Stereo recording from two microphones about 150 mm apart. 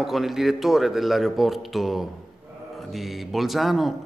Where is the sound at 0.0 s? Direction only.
Centre (ahead or behind).